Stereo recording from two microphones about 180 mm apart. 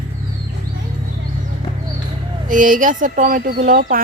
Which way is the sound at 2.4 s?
45° right (ahead or behind).